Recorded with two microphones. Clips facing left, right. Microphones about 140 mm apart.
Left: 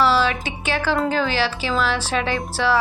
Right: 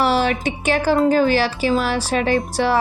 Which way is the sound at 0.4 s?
45° right (ahead or behind).